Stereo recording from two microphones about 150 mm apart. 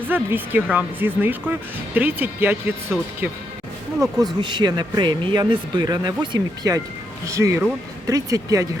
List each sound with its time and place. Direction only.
0.1 s speech: 10° right (ahead or behind)
4.4 s speech: 30° right (ahead or behind)